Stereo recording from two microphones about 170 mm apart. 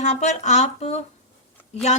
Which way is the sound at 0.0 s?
40° left (ahead or behind).